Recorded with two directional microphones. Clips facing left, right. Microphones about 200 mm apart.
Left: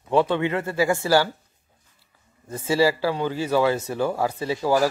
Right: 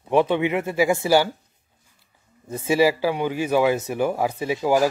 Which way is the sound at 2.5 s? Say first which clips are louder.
Right 2 dB; 15° right (ahead or behind).